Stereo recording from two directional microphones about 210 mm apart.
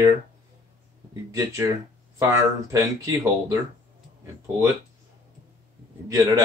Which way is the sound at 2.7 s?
15° right (ahead or behind).